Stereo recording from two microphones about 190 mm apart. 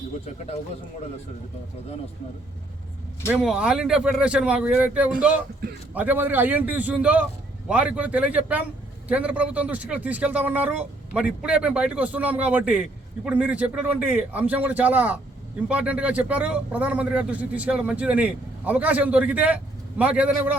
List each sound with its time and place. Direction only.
0.3 s a man's voice: 35° left (ahead or behind)
3.2 s a man's voice: 5° right (ahead or behind)